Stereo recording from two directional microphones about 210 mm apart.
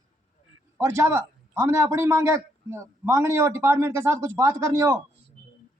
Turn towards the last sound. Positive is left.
turn(degrees=-10)  # may be behind; listen again after turning